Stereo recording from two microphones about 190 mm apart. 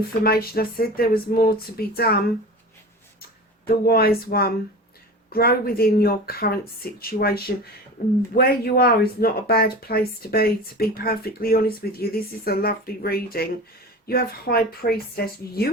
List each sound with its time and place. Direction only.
0.2 s speech: 55° left (ahead or behind)
3.7 s speech: 55° left (ahead or behind)